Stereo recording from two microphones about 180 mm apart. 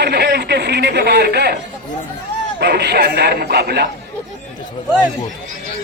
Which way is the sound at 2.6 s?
65° right (ahead or behind).